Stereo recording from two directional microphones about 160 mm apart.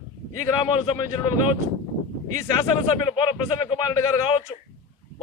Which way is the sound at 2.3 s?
25° left (ahead or behind).